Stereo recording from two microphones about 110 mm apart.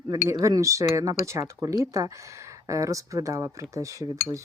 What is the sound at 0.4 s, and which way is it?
Speech, 30° right (ahead or behind).